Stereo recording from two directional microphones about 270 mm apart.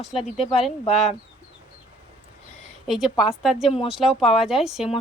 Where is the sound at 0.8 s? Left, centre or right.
Left.